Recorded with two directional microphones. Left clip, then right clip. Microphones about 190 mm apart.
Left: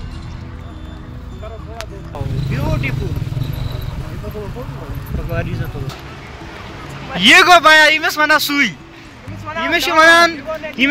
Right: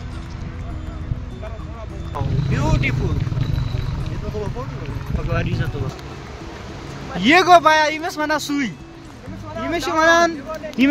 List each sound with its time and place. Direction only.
2.5 s speech: 20° right (ahead or behind)
5.3 s speech: 25° right (ahead or behind)
7.2 s a man's voice: 10° right (ahead or behind)
10.8 s speech: 30° right (ahead or behind)